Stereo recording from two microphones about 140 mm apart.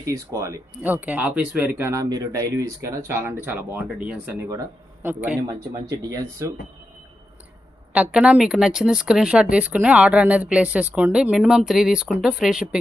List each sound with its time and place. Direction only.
0.0 s speech: 25° right (ahead or behind)
0.7 s speech: 10° right (ahead or behind)
4.3 s speech: 20° right (ahead or behind)
5.0 s speech: 10° right (ahead or behind)
5.5 s speech: 25° right (ahead or behind)
8.1 s speech: 5° right (ahead or behind)